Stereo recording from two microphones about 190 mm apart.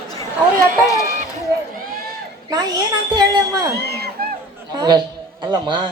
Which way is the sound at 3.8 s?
55° right (ahead or behind).